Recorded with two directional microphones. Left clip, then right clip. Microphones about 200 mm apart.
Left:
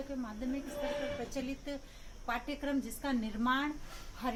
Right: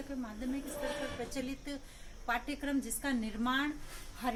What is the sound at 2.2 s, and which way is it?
A woman's voice, 10° left (ahead or behind).